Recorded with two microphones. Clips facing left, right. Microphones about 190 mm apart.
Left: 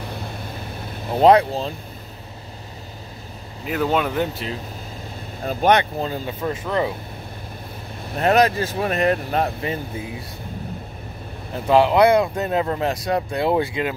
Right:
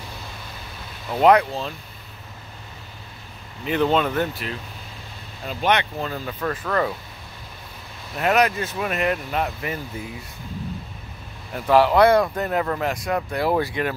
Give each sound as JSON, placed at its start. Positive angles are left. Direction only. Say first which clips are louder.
{"t": 1.1, "sound": "speech", "louder": "left 2 dB", "side_deg": 30}
{"t": 3.6, "sound": "speech", "louder": "right 1 dB", "side_deg": 5}
{"t": 5.4, "sound": "speech", "louder": "left 5 dB", "side_deg": 45}
{"t": 8.1, "sound": "speech", "louder": "left 3 dB", "side_deg": 35}
{"t": 11.5, "sound": "speech", "louder": "left 1 dB", "side_deg": 25}